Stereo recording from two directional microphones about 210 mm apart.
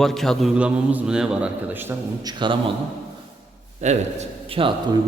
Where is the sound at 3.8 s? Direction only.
35° right (ahead or behind).